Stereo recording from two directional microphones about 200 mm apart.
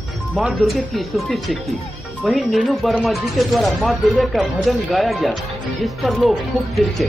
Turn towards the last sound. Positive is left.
turn(degrees=0)  # may be behind; listen again after turning